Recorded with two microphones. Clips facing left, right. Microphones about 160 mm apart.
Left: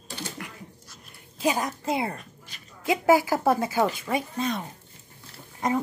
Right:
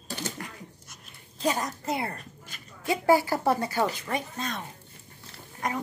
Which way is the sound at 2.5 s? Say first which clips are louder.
Right 1 dB; 50° right (ahead or behind).